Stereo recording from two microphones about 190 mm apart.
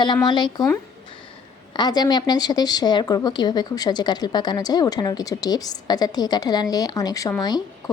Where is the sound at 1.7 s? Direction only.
20° left (ahead or behind).